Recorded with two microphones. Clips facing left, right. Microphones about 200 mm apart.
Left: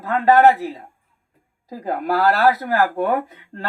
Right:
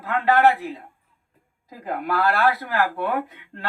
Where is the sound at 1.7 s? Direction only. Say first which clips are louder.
Left 4 dB; 35° left (ahead or behind).